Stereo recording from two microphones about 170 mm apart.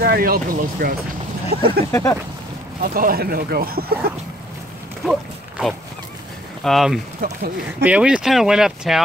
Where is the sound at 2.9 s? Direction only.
60° right (ahead or behind).